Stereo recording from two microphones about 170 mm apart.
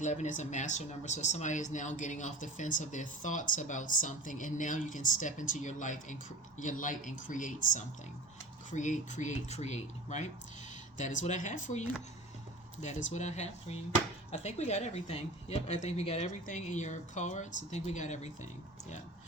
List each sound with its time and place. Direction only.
0.0 s speech: 45° left (ahead or behind)
12.8 s speech: 45° left (ahead or behind)